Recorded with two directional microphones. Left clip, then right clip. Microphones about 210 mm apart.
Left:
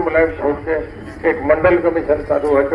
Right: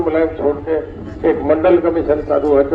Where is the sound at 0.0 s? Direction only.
55° right (ahead or behind).